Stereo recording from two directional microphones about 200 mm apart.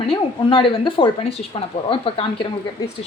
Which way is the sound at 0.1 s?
25° left (ahead or behind).